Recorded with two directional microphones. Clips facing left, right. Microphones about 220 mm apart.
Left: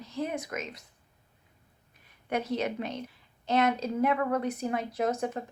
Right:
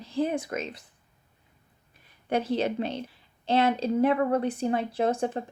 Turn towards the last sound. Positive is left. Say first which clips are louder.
# right 3 dB
turn(degrees=-30)  # may be behind; listen again after turning